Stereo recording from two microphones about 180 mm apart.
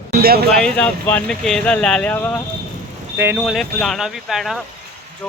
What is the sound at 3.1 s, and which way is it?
Speech, 10° right (ahead or behind).